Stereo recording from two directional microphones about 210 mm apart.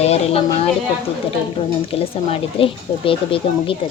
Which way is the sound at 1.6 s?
25° left (ahead or behind).